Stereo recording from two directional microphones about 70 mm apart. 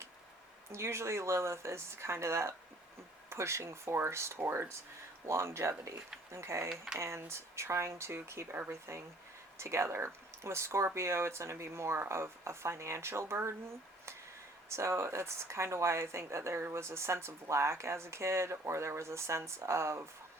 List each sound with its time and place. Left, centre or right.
0.7 s speech: right
6.7 s speech: centre
7.0 s speech: right
14.7 s speech: right